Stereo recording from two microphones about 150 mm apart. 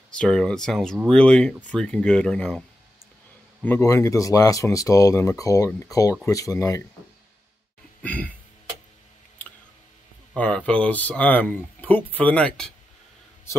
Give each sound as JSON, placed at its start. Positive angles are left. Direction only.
{"t": 0.1, "sound": "speech", "side_deg": 5}
{"t": 3.6, "sound": "speech", "side_deg": 15}
{"t": 8.0, "sound": "throat clearing", "side_deg": 10}
{"t": 10.3, "sound": "speech", "side_deg": 10}